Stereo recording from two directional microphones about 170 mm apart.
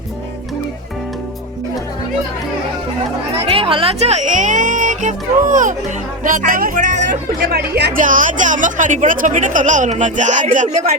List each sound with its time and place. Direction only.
3.5 s speech: 30° right (ahead or behind); by 10.9 s 50° right (ahead or behind)